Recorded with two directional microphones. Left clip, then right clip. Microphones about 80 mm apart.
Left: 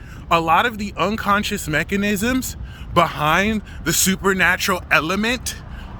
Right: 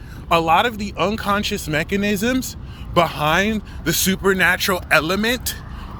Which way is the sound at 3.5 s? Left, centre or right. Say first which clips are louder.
Even; left.